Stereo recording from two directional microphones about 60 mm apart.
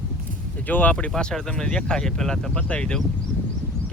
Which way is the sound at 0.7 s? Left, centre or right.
Left.